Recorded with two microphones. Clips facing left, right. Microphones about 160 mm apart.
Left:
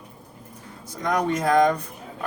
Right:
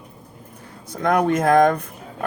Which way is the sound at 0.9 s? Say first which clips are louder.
Right 5 dB; 55° right (ahead or behind).